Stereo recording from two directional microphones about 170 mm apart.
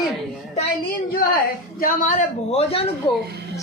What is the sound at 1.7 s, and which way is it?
A man's voice, 55° left (ahead or behind).